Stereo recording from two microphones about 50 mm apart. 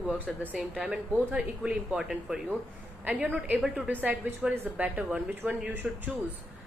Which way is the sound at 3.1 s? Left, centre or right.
Right.